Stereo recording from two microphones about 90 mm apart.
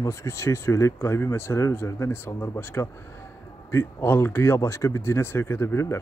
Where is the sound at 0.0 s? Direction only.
35° left (ahead or behind).